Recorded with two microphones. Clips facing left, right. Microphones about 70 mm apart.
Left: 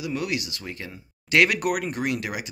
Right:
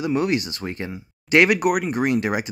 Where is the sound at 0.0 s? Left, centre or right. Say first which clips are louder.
Right 7 dB; right.